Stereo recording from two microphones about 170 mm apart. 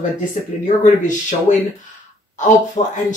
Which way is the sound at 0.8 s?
45° left (ahead or behind).